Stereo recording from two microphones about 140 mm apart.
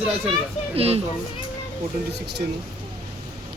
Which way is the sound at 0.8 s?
45° right (ahead or behind).